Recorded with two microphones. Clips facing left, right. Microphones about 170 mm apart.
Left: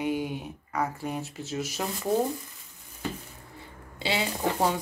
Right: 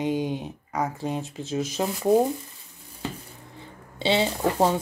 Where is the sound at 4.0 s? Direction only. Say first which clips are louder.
Right 6 dB; 25° right (ahead or behind).